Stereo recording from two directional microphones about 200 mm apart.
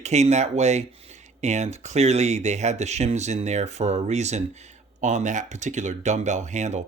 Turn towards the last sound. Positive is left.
turn(degrees=-35)  # may be behind; listen again after turning